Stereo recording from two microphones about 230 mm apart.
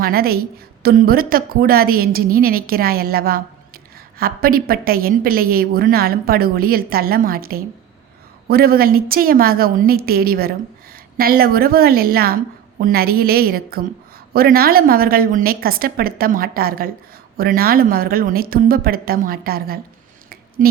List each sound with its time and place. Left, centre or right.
0.0 s a woman's voice: right